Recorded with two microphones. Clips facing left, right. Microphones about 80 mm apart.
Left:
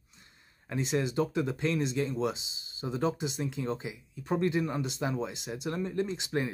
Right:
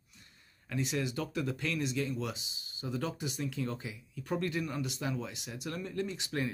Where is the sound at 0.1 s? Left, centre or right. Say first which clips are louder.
Left 2 dB; left.